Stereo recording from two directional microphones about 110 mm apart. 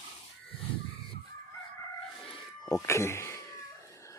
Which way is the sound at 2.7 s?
25° left (ahead or behind).